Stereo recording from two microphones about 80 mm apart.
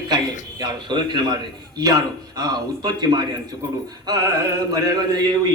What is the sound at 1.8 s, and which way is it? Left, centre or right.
Speech, right.